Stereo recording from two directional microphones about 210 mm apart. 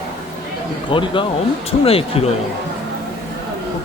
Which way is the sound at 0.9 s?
25° left (ahead or behind).